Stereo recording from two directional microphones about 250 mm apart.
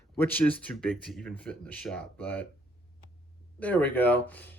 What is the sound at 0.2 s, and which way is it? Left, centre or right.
Speech, centre.